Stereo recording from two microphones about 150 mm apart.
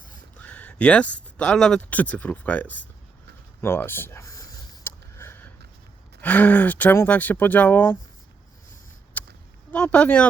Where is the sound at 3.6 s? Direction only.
15° left (ahead or behind).